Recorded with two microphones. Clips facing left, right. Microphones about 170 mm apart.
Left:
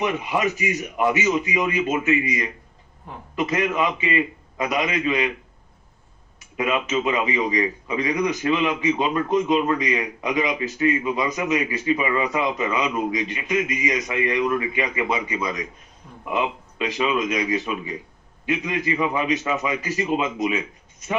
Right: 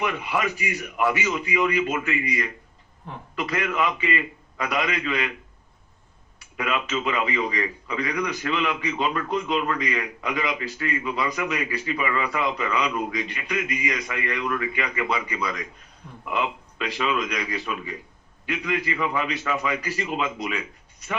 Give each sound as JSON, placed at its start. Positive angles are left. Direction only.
{"t": 0.0, "sound": "a man's voice", "side_deg": 20}
{"t": 6.6, "sound": "a man's voice", "side_deg": 20}